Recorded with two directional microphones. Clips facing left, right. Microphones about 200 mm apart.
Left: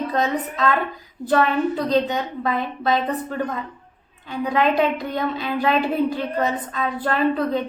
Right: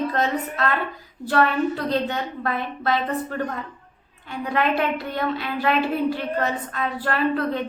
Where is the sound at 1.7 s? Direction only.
15° left (ahead or behind).